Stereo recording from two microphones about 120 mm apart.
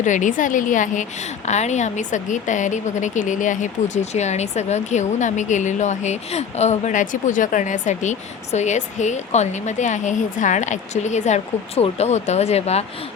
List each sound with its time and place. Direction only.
0.0 s a woman's voice: 90° left
1.5 s a woman's voice: 70° left (ahead or behind)